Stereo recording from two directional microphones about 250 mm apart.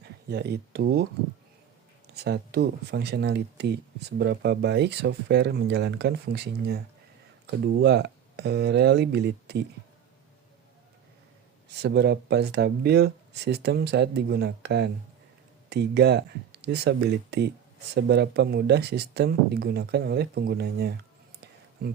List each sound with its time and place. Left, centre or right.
0.0 s speech: right
2.1 s speech: right
11.8 s speech: right